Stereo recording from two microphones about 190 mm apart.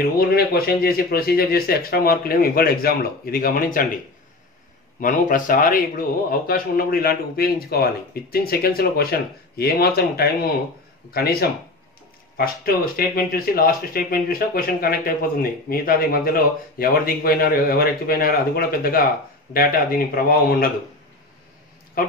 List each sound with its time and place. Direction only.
0.0 s speech: 50° left (ahead or behind)
5.0 s speech: 45° left (ahead or behind)
22.0 s speech: 50° left (ahead or behind)